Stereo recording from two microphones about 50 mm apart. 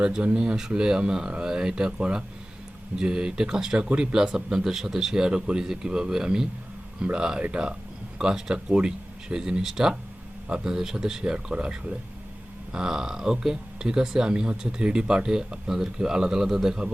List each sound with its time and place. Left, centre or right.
0.0 s speech: centre